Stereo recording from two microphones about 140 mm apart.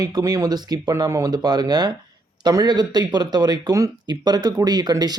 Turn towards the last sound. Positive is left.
turn(degrees=-30)  # may be behind; listen again after turning